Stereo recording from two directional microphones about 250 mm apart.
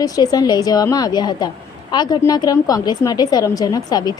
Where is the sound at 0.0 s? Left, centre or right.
Centre.